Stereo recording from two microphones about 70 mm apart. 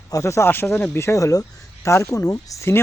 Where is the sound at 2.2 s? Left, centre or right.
Left.